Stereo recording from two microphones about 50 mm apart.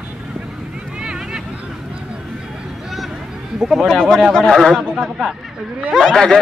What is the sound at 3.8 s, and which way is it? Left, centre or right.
Speech, centre.